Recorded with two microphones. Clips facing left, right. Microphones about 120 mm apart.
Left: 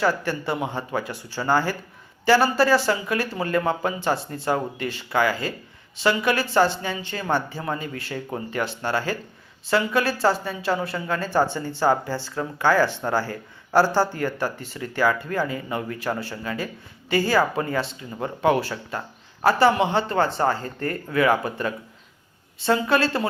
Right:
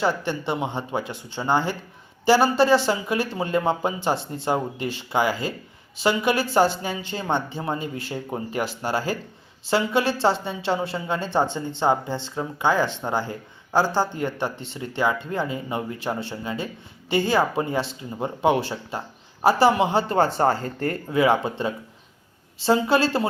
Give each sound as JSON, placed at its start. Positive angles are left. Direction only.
{"t": 0.2, "sound": "a woman's voice", "side_deg": -25}
{"t": 3.7, "sound": "a woman's voice", "side_deg": -25}
{"t": 4.5, "sound": "speech", "side_deg": -15}
{"t": 4.9, "sound": "a woman's voice", "side_deg": -25}
{"t": 6.3, "sound": "a woman's voice", "side_deg": -5}
{"t": 7.1, "sound": "a woman's voice", "side_deg": -25}
{"t": 7.8, "sound": "a woman's voice", "side_deg": 0}
{"t": 8.1, "sound": "speech", "side_deg": -15}
{"t": 9.6, "sound": "a woman's voice", "side_deg": -30}